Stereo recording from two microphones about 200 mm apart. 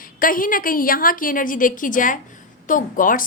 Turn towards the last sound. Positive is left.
turn(degrees=45)  # may be behind; listen again after turning